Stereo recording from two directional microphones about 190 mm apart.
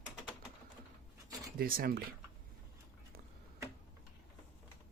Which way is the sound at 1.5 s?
50° right (ahead or behind).